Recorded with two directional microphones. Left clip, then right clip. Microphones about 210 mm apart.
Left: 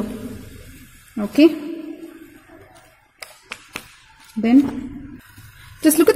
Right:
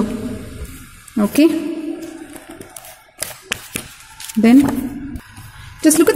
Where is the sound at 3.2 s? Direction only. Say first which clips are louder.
Right 9 dB; 40° right (ahead or behind).